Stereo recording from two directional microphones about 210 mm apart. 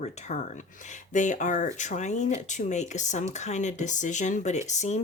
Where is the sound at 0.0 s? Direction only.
35° left (ahead or behind).